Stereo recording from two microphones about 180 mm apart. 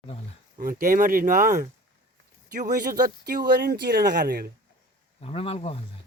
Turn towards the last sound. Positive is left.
turn(degrees=30)  # may be behind; listen again after turning